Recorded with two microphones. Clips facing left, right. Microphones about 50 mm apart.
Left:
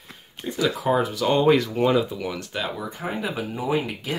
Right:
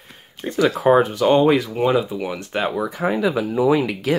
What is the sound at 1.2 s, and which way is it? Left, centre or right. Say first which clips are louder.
Speech: right 6 dB; right.